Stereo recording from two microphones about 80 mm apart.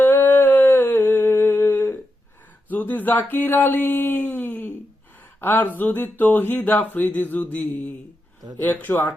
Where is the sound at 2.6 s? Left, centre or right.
Left.